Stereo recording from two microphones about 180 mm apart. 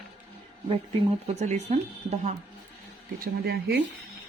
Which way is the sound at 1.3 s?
40° right (ahead or behind).